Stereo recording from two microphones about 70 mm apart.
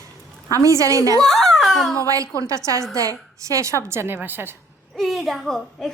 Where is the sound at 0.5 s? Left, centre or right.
Right.